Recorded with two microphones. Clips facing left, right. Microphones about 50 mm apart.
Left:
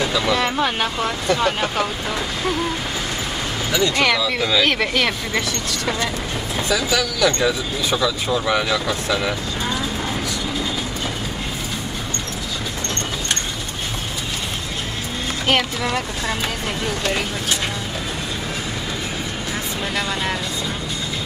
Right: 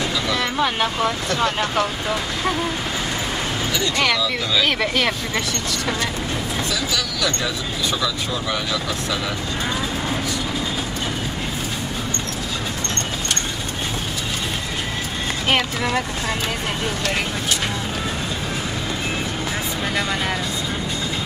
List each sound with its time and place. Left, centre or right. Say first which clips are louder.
0.6 s speech: right 1 dB; centre
1.3 s speech: left 1 dB; centre
4.0 s speech: left 2 dB; centre
7.2 s speech: left 5 dB; centre
8.5 s speech: left 6 dB; left
8.8 s speech: left 3 dB; left